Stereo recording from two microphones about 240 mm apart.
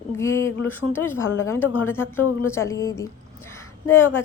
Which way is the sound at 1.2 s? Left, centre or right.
Left.